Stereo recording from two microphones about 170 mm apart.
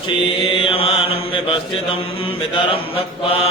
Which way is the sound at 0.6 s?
35° left (ahead or behind).